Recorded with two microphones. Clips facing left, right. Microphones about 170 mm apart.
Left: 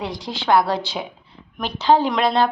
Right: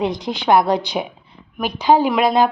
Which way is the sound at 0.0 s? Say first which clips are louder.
Right 6 dB; 20° right (ahead or behind).